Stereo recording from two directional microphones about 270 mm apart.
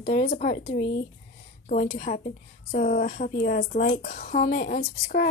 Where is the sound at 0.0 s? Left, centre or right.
Left.